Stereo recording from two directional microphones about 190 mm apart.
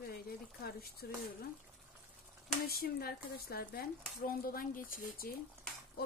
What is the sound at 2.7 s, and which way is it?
Speech, 55° left (ahead or behind).